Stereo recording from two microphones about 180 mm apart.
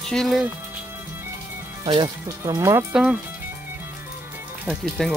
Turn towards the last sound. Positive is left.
turn(degrees=0)  # may be behind; listen again after turning